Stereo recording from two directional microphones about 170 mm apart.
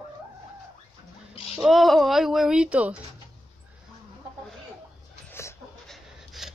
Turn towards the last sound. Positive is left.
turn(degrees=0)  # may be behind; listen again after turning